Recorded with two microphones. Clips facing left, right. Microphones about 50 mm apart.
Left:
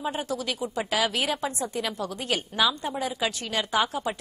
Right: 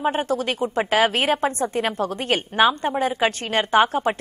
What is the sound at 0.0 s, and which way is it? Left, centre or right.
A woman's voice, right.